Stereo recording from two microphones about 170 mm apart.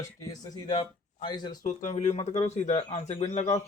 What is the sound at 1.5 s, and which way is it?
Speech, 50° left (ahead or behind).